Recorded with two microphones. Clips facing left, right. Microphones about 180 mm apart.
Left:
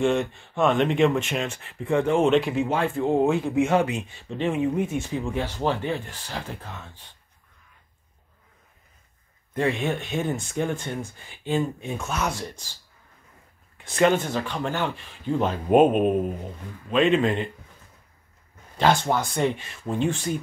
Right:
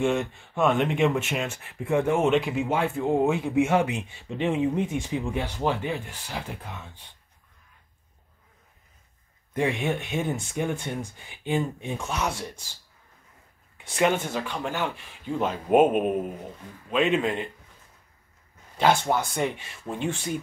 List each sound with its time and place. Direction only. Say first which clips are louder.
0.0 s speech: left 2 dB; 5° right (ahead or behind)
9.6 s speech: left 1 dB; 10° right (ahead or behind)
13.8 s speech: left 3 dB; 10° right (ahead or behind)
18.8 s speech: left 1 dB; 10° right (ahead or behind)